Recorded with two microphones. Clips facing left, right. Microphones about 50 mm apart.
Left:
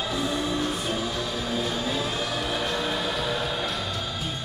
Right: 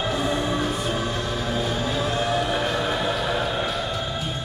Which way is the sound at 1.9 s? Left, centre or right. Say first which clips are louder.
Right 4 dB; centre.